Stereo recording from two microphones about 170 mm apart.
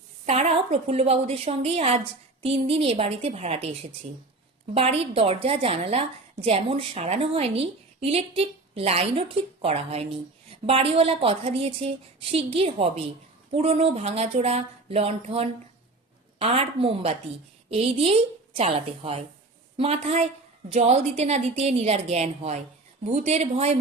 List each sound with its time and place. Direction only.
0.3 s a woman's voice: 40° right (ahead or behind)